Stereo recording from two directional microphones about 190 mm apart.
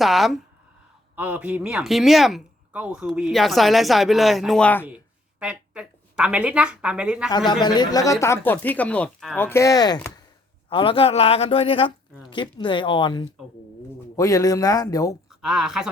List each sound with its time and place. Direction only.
0.0 s speech: centre (ahead or behind)
5.4 s speech: 5° right (ahead or behind)
7.3 s speech: 20° left (ahead or behind)
15.3 s speech: 5° right (ahead or behind)